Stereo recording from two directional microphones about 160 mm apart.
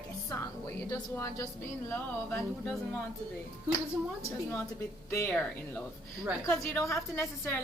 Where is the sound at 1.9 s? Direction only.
5° left (ahead or behind).